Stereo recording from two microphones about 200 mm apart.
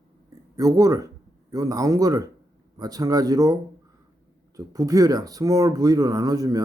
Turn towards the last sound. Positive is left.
turn(degrees=-20)  # may be behind; listen again after turning